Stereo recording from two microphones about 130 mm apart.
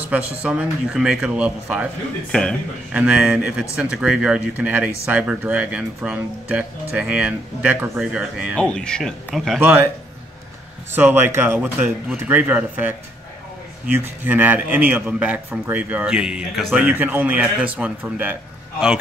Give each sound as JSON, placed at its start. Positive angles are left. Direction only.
{"t": 0.1, "sound": "speech", "side_deg": -10}
{"t": 2.3, "sound": "speech", "side_deg": 10}
{"t": 2.9, "sound": "speech", "side_deg": -10}
{"t": 8.5, "sound": "speech", "side_deg": 10}
{"t": 9.6, "sound": "speech", "side_deg": -15}
{"t": 10.9, "sound": "speech", "side_deg": -15}